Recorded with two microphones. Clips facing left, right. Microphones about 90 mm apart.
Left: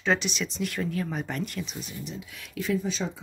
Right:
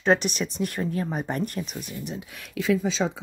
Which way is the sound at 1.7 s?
55° right (ahead or behind).